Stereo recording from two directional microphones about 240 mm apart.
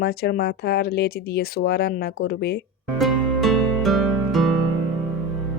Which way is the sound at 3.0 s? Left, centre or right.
Centre.